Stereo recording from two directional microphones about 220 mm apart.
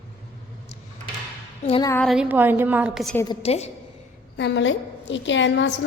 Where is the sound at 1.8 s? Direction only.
10° left (ahead or behind).